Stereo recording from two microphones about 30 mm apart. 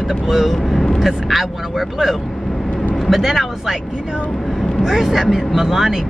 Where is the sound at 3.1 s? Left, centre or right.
Centre.